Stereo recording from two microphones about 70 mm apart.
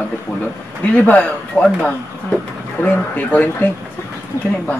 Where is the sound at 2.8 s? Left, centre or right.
Left.